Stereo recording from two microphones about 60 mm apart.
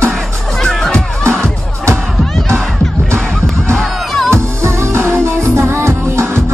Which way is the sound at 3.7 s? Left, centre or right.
Centre.